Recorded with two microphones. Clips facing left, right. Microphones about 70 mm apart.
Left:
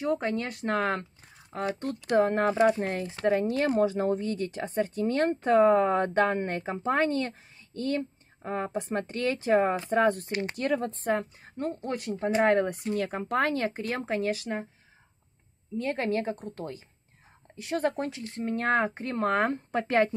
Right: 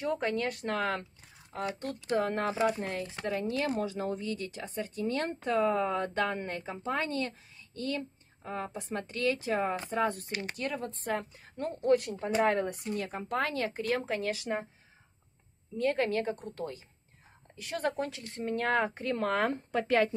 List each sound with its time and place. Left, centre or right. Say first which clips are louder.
0.0 s speech: left 2 dB; left
11.1 s speech: left 6 dB; left
11.5 s speech: left 1 dB; centre
12.1 s speech: left 4 dB; left
12.9 s speech: left 5 dB; left; by 14.3 s centre
15.8 s speech: even; left